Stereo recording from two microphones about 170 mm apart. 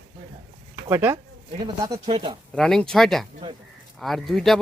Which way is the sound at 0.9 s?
15° right (ahead or behind).